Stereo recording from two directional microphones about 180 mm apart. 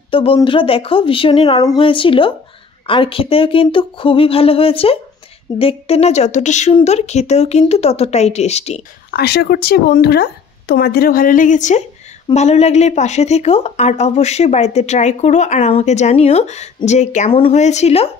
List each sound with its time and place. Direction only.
0.1 s a woman's voice: 30° left (ahead or behind)
9.1 s a woman's voice: 65° left (ahead or behind); by 18.1 s 35° left (ahead or behind)